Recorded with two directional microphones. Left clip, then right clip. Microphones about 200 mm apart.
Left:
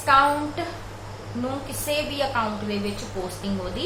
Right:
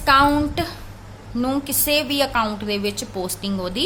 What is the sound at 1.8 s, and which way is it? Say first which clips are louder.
A woman's voice: right 5 dB; 60° right (ahead or behind).